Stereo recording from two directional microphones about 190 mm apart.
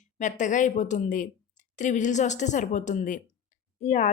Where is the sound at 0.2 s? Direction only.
40° left (ahead or behind).